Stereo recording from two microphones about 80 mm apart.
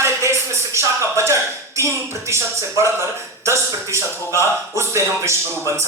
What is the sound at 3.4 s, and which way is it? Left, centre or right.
A man's voice, right.